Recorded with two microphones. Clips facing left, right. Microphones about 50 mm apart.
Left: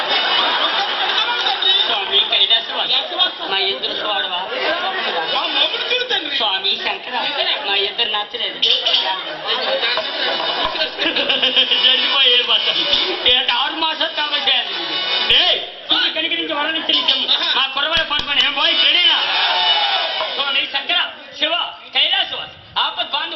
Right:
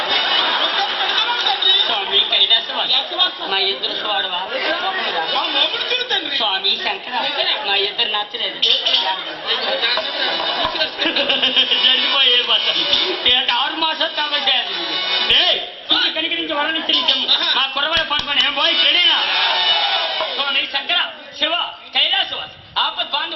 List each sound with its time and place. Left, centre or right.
0.1 s a sound: centre
1.5 s chatter: centre
2.1 s chatter: left
4.1 s a woman's voice: centre
9.7 s a woman's voice: centre
15.1 s music: centre
16.2 s a woman's voice: centre
18.4 s speech: centre
19.0 s a sound: centre